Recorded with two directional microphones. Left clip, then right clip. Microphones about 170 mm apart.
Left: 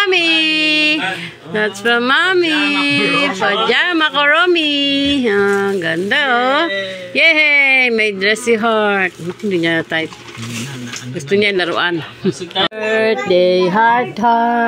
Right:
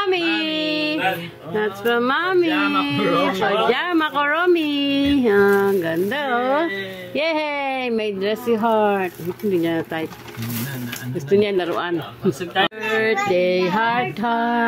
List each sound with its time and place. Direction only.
0.0 s a sound: 10° left (ahead or behind)
1.5 s speech: 10° left (ahead or behind)
11.2 s speech: 5° left (ahead or behind)